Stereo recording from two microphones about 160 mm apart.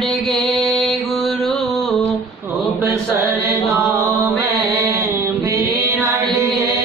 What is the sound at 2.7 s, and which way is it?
Chant, 15° right (ahead or behind).